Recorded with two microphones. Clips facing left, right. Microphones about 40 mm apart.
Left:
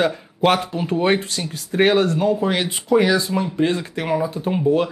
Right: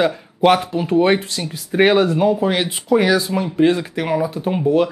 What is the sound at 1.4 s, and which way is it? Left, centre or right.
Speech, centre.